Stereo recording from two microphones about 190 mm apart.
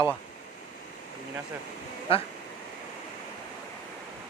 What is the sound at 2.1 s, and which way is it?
Speech, 30° left (ahead or behind).